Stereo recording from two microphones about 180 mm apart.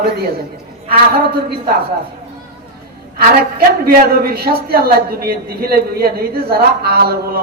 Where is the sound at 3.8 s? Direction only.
55° right (ahead or behind).